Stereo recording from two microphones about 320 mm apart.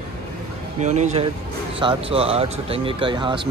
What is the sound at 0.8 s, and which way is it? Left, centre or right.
Speech, right.